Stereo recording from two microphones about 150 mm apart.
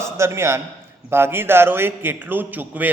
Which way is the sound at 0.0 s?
20° right (ahead or behind).